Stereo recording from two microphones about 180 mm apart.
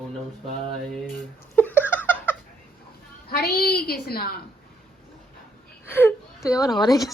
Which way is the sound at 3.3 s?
60° left (ahead or behind).